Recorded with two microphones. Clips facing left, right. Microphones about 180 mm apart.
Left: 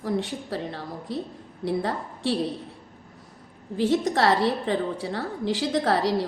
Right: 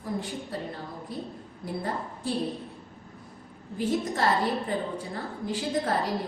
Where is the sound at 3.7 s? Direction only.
90° left.